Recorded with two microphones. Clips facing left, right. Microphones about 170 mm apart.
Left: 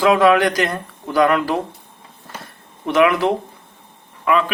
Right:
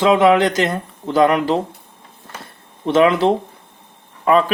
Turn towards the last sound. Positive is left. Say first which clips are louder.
# right 3 dB
turn(degrees=-35)  # may be behind; listen again after turning